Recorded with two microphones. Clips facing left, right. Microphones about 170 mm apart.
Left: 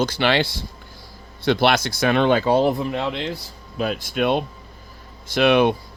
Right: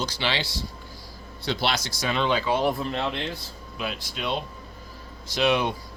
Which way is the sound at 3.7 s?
45° left (ahead or behind).